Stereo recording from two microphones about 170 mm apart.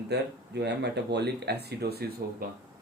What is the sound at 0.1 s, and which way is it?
Speech, 80° right.